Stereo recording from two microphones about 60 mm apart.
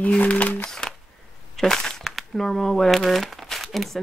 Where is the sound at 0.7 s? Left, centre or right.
Centre.